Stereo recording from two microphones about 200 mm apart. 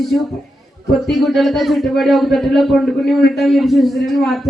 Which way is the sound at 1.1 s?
Centre (ahead or behind).